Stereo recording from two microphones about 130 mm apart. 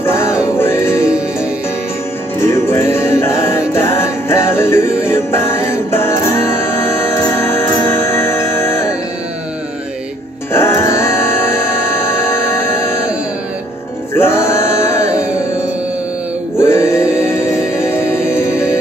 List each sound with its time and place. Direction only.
0.0 s music: 20° left (ahead or behind)
1.0 s music: 5° right (ahead or behind)
2.4 s music: 20° left (ahead or behind)
10.5 s a sound: 20° left (ahead or behind)
14.1 s male singing: 20° left (ahead or behind)
16.5 s music: 20° left (ahead or behind)